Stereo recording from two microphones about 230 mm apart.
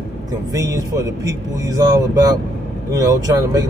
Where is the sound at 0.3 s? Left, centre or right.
Centre.